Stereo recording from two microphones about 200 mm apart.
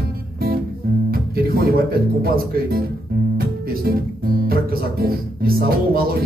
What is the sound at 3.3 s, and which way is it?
Music, 50° right (ahead or behind).